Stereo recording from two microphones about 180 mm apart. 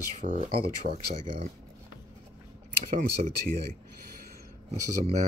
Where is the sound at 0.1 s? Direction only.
40° right (ahead or behind).